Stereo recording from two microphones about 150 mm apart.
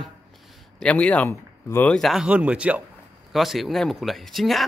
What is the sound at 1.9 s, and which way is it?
A man's voice, centre (ahead or behind).